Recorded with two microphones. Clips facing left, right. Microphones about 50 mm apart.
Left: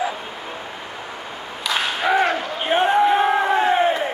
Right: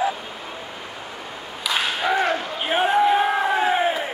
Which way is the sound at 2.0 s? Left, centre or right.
Centre.